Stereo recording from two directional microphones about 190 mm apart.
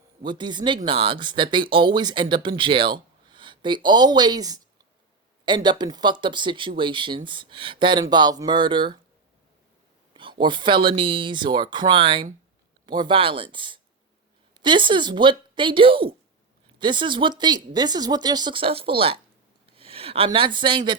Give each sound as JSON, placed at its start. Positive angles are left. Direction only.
{"t": 0.2, "sound": "speech", "side_deg": -25}
{"t": 10.2, "sound": "speech", "side_deg": -25}